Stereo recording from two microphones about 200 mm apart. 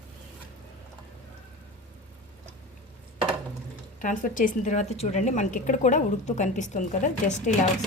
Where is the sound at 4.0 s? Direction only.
40° left (ahead or behind).